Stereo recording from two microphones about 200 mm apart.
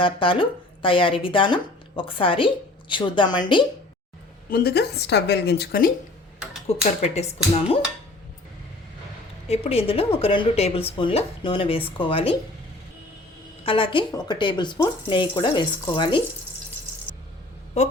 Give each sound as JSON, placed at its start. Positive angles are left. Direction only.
{"t": 0.0, "sound": "speech", "side_deg": 25}
{"t": 4.4, "sound": "a woman's voice", "side_deg": 50}
{"t": 6.4, "sound": "a sound", "side_deg": -5}
{"t": 7.0, "sound": "speech", "side_deg": 35}
{"t": 9.5, "sound": "speech", "side_deg": 30}
{"t": 13.7, "sound": "speech", "side_deg": 25}